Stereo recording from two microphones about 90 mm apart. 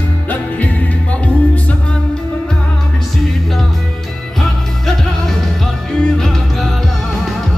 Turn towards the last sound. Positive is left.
turn(degrees=5)  # may be behind; listen again after turning